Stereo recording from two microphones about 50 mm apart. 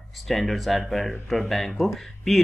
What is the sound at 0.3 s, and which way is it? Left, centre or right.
Speech, centre.